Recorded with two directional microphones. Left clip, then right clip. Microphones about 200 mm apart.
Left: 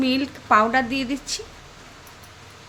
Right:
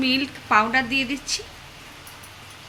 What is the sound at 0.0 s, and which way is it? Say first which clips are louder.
Speech: right 1 dB; 40° left (ahead or behind).